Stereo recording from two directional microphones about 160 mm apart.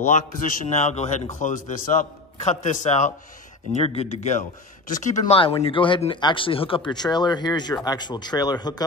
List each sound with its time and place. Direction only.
0.1 s a man's voice: 55° left (ahead or behind)
5.2 s speech: 35° left (ahead or behind)